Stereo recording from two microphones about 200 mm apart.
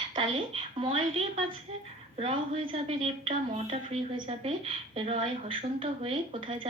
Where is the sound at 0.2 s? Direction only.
25° right (ahead or behind).